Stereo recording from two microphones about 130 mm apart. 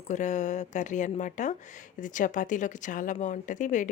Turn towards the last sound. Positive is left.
turn(degrees=70)  # may be behind; listen again after turning